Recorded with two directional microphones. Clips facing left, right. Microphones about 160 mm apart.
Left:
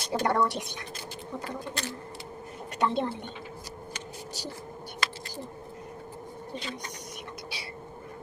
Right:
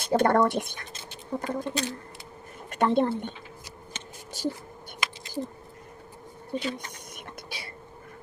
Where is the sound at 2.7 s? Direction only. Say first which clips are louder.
Right 5 dB; 50° right (ahead or behind).